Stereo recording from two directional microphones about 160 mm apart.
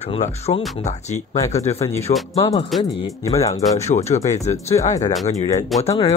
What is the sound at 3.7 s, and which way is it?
Speech, 45° left (ahead or behind).